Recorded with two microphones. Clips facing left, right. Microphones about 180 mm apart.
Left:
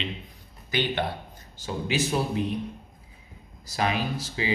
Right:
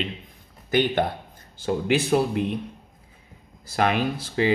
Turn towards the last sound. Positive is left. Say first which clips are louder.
# right 7 dB
turn(degrees=-55)  # may be behind; listen again after turning